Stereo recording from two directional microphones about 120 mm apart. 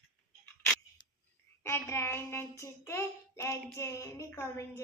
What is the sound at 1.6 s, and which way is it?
Child singing, 20° left (ahead or behind).